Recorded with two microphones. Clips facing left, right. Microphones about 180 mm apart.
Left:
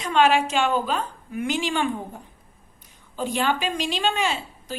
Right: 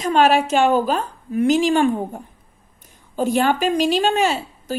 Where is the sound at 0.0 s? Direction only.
40° right (ahead or behind).